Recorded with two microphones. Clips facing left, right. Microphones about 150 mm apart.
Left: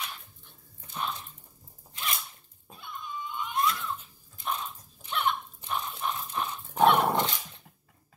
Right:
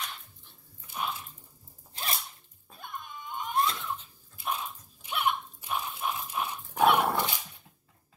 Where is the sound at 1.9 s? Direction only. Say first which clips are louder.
Even; 35° right (ahead or behind).